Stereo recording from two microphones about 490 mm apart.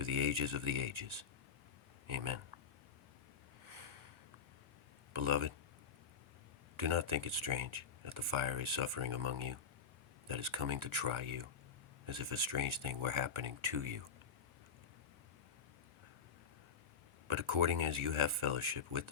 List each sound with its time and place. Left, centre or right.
0.0 s speech: right
3.7 s a sound: right
5.1 s speech: right
6.7 s speech: right
17.2 s speech: right